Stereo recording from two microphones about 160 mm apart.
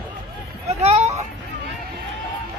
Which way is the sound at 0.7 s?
40° right (ahead or behind).